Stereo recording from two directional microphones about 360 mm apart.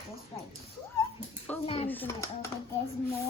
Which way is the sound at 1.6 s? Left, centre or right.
Centre.